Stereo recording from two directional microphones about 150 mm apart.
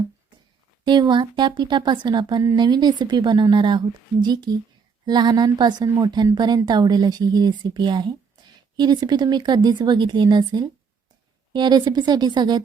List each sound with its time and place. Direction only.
0.9 s a woman's voice: 30° right (ahead or behind)